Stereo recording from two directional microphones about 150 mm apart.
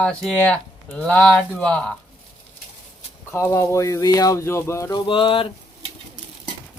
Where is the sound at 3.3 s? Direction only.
15° left (ahead or behind).